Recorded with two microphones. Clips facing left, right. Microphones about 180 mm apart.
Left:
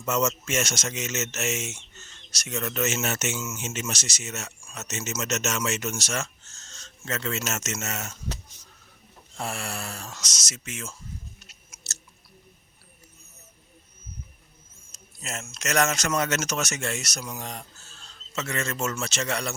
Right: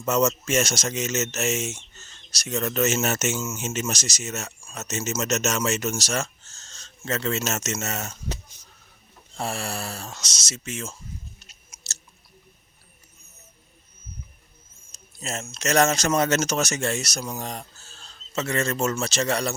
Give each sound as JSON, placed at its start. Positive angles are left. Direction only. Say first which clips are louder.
{"t": 0.0, "sound": "speech", "louder": "right 4 dB", "side_deg": -35}
{"t": 3.4, "sound": "speech", "louder": "right 4 dB", "side_deg": -30}
{"t": 3.7, "sound": "speech", "louder": "right 4 dB", "side_deg": -40}
{"t": 9.4, "sound": "speech", "louder": "right 3 dB", "side_deg": -35}
{"t": 11.3, "sound": "scissors", "louder": "left 1 dB", "side_deg": -25}
{"t": 15.2, "sound": "speech", "louder": "right 5 dB", "side_deg": -30}